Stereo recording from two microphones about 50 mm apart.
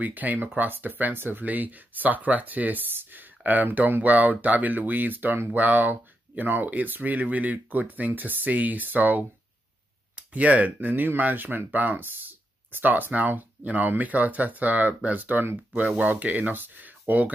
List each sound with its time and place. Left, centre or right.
0.0 s speech: right